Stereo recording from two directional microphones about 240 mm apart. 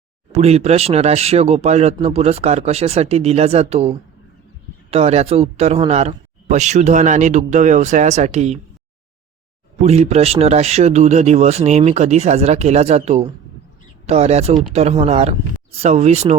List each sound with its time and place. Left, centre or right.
0.3 s a man's voice: right
9.8 s a man's voice: right